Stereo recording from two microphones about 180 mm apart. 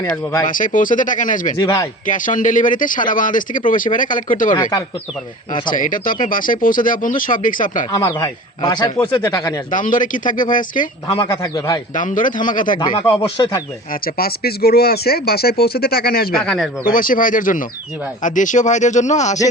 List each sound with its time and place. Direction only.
0.1 s speech: 15° left (ahead or behind)
0.4 s speech: 50° left (ahead or behind)
1.6 s speech: 20° left (ahead or behind)
2.0 s speech: 45° left (ahead or behind)
4.5 s speech: 20° left (ahead or behind)
5.7 s speech: 50° left (ahead or behind)
7.9 s speech: 20° left (ahead or behind)
9.7 s speech: 45° left (ahead or behind)
11.4 s speech: 20° left (ahead or behind)
11.9 s speech: 45° left (ahead or behind)
12.8 s speech: 25° left (ahead or behind)
13.9 s speech: 55° left (ahead or behind)
16.3 s speech: 5° left (ahead or behind)
16.8 s speech: 50° left (ahead or behind)